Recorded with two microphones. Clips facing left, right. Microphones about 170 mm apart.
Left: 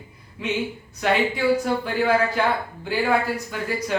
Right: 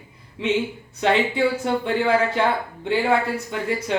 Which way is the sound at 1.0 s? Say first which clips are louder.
Right 2 dB; 25° right (ahead or behind).